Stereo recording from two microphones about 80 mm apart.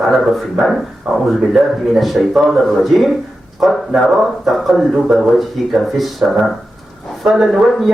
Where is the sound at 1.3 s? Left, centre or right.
Centre.